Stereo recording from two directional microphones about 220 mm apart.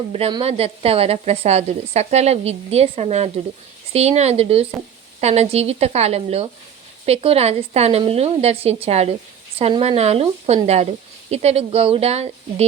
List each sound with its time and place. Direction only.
0.1 s speech: 25° right (ahead or behind)